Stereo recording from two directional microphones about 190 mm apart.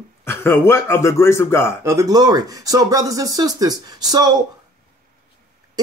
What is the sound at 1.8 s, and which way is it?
Speech, 15° right (ahead or behind).